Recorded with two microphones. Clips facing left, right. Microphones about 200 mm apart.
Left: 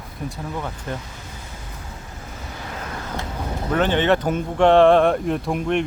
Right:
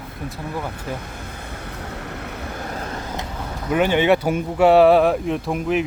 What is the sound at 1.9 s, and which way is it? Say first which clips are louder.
Vehicle: right 7 dB; 70° right (ahead or behind).